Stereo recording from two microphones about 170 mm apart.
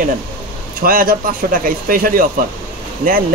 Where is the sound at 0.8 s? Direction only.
60° right (ahead or behind).